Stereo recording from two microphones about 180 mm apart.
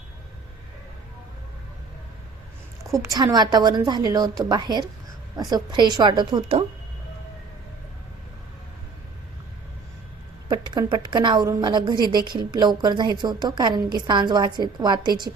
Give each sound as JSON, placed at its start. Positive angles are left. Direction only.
{"t": 2.8, "sound": "a woman's voice", "side_deg": -15}
{"t": 10.5, "sound": "a woman's voice", "side_deg": -25}